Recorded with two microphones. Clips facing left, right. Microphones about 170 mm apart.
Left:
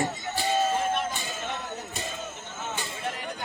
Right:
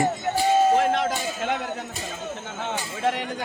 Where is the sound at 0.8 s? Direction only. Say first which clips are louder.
Right 6 dB; 90° right.